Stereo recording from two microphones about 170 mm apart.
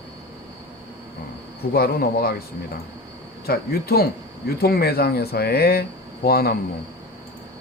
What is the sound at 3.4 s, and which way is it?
Speech, 65° left (ahead or behind).